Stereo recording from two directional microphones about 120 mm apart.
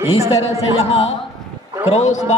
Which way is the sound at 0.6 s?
65° left (ahead or behind).